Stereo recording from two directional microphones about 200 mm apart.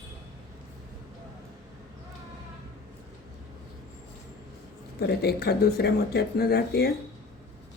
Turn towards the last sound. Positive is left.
turn(degrees=55)  # may be behind; listen again after turning